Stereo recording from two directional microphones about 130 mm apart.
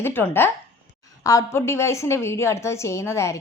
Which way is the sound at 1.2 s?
25° left (ahead or behind).